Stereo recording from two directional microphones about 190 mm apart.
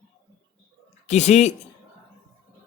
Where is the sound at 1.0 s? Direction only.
35° left (ahead or behind).